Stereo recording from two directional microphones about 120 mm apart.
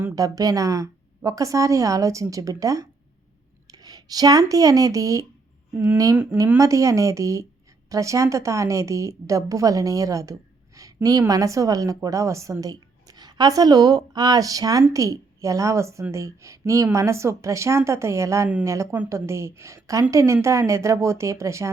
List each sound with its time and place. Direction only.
0.2 s a woman's voice: 30° right (ahead or behind)